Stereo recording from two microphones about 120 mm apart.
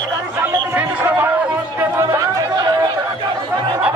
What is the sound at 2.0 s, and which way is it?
Chatter, 30° right (ahead or behind).